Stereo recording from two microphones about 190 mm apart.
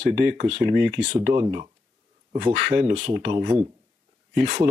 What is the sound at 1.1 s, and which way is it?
Speech, 25° right (ahead or behind).